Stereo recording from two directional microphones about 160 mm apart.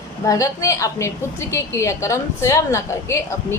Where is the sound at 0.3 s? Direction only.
20° left (ahead or behind).